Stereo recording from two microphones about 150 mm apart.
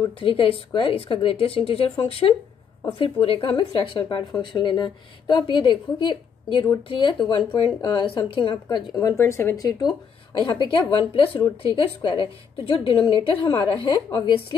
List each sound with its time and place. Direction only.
0.2 s speech: 35° left (ahead or behind)